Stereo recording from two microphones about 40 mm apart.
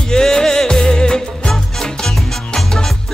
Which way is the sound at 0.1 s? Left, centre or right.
Centre.